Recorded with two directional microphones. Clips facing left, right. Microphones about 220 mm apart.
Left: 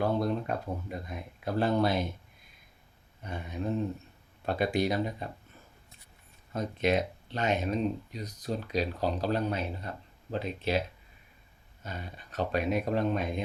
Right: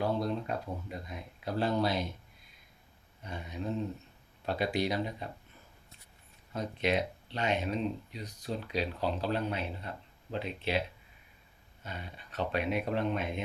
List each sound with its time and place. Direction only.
0.0 s speech: 50° left (ahead or behind)
3.2 s speech: 50° left (ahead or behind)
6.5 s speech: 45° left (ahead or behind)